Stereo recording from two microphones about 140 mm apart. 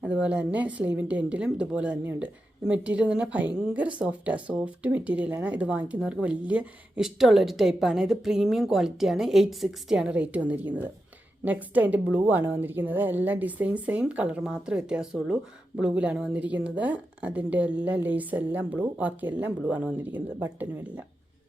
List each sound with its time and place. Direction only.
0.0 s a woman's voice: 5° right (ahead or behind)